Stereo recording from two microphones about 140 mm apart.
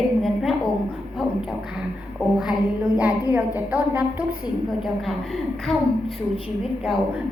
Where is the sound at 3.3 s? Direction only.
15° right (ahead or behind).